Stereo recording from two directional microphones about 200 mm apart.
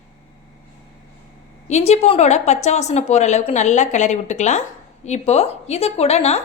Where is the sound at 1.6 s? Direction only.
35° left (ahead or behind).